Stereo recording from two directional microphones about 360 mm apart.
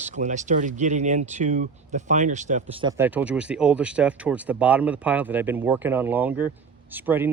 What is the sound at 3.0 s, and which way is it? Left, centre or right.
Speech, centre.